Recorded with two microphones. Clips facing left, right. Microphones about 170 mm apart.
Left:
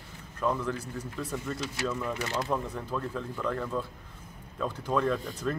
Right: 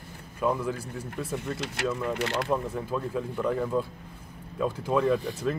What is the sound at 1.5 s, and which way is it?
Speech, 70° right (ahead or behind).